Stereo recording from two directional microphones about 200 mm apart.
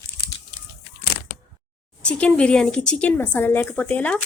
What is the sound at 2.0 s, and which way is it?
Speech, 5° left (ahead or behind).